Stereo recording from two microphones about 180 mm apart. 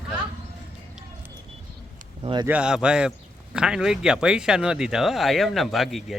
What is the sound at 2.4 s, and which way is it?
Speech, 5° right (ahead or behind).